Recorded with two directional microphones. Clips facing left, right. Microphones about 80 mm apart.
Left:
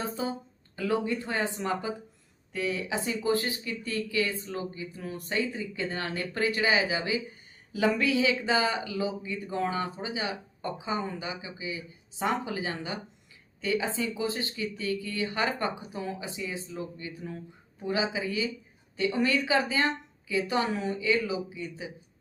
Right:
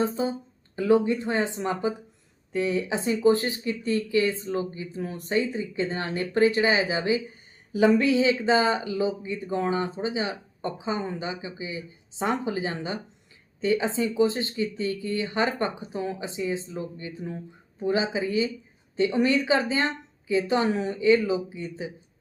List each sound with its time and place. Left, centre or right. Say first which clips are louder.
0.0 s speech: right 6 dB; right